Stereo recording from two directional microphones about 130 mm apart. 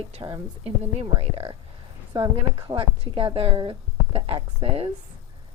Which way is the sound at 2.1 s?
35° right (ahead or behind).